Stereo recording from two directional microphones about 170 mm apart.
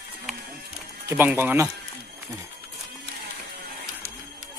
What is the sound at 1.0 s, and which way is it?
Speech, 10° right (ahead or behind).